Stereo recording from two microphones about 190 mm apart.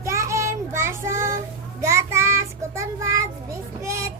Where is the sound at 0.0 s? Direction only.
15° right (ahead or behind).